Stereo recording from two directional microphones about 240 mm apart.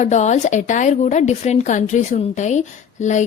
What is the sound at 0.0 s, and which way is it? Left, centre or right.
A woman's voice, left.